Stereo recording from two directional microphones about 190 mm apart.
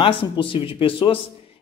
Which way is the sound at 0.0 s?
25° left (ahead or behind).